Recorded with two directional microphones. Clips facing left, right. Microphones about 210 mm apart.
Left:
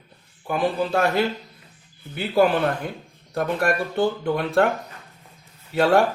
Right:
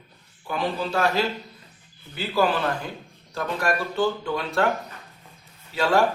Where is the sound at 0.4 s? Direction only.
50° left (ahead or behind).